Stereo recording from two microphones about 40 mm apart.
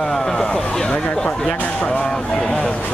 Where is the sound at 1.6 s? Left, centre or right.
Left.